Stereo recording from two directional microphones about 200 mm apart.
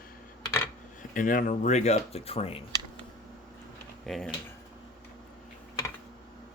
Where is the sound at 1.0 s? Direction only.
40° left (ahead or behind).